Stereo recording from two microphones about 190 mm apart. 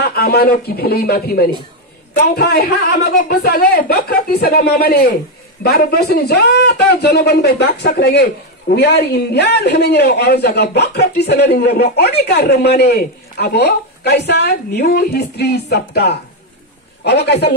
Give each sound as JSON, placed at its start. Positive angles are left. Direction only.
{"t": 0.1, "sound": "speech", "side_deg": 55}